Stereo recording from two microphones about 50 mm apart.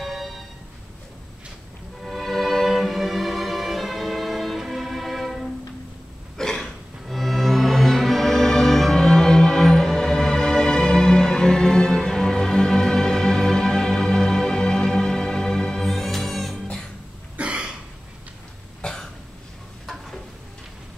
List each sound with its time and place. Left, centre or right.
0.0 s music: centre
2.0 s music: centre
17.4 s cough: right
18.8 s cough: centre